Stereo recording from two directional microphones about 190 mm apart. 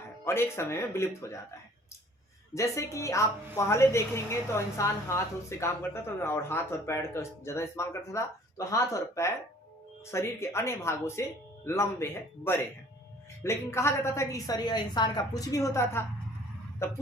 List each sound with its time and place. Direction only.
0.3 s a woman's voice: 15° left (ahead or behind)
2.6 s a woman's voice: 15° left (ahead or behind)